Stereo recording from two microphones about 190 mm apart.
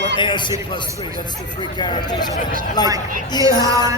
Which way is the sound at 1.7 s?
20° left (ahead or behind).